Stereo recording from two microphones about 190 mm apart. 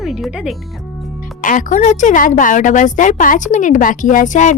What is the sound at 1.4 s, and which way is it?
A woman's voice, 45° left (ahead or behind).